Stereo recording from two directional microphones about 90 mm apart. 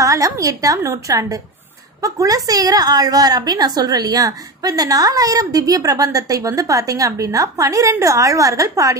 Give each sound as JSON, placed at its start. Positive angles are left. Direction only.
{"t": 0.0, "sound": "a woman's voice", "side_deg": -40}